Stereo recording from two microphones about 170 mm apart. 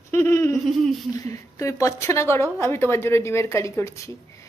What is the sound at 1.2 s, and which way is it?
A woman's voice, 20° left (ahead or behind).